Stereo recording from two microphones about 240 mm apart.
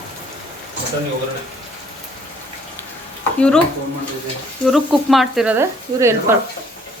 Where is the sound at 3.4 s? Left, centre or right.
Centre.